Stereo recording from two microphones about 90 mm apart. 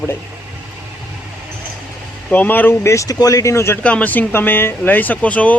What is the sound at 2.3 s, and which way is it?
Speech, 20° left (ahead or behind).